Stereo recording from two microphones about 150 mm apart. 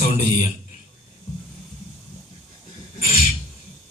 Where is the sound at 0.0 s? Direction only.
55° left (ahead or behind).